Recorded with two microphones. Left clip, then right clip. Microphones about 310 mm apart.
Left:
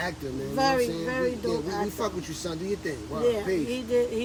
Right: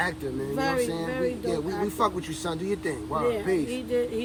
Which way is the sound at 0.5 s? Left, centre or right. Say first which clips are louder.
Left 3 dB; centre.